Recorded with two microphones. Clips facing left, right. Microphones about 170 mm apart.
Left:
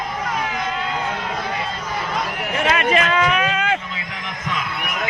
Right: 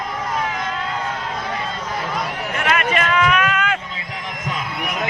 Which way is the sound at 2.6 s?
30° left (ahead or behind).